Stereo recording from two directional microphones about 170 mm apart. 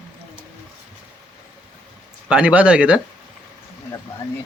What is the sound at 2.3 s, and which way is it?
Speech, 10° right (ahead or behind).